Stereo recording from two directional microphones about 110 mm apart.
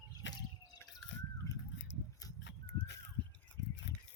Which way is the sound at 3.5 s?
15° left (ahead or behind).